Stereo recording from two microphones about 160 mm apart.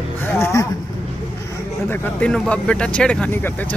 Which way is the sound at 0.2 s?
15° left (ahead or behind).